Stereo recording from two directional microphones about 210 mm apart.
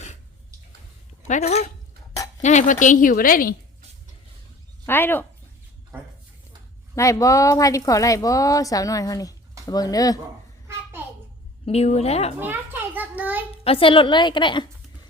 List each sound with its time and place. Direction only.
1.3 s a woman's voice: 30° left (ahead or behind)
4.9 s a woman's voice: 10° left (ahead or behind)
6.9 s a woman's voice: 15° left (ahead or behind)
11.6 s a woman's voice: 30° left (ahead or behind)
12.4 s a child's voice: 10° right (ahead or behind)
13.7 s a woman's voice: 25° left (ahead or behind)